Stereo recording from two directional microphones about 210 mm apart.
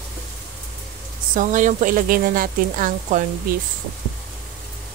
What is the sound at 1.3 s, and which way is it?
Speech, 35° right (ahead or behind).